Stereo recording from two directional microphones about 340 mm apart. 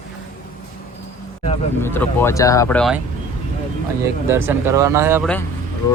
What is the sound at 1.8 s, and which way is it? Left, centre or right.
Speech, centre.